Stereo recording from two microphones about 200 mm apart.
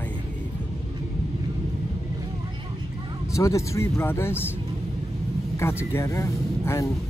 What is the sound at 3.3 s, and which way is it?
Speech, 15° left (ahead or behind).